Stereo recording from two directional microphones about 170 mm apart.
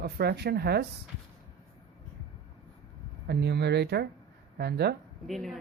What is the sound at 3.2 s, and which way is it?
Speech, 75° right (ahead or behind).